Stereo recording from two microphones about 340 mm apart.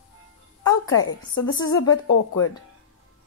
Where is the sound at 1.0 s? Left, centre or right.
Left.